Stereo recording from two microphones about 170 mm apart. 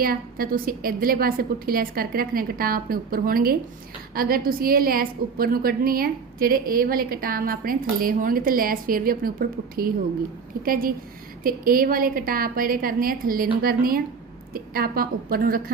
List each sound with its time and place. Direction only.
0.0 s a woman's voice: 60° right (ahead or behind)